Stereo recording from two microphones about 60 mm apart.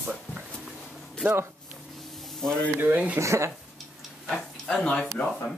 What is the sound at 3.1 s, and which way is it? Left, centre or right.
Speech, right.